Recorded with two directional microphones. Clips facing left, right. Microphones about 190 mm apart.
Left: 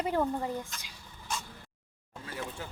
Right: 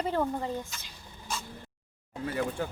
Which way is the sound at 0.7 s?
Centre (ahead or behind).